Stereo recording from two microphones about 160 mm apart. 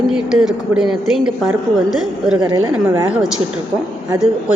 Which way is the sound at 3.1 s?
5° right (ahead or behind).